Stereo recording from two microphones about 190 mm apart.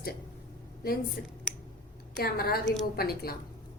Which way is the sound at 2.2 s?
50° left (ahead or behind).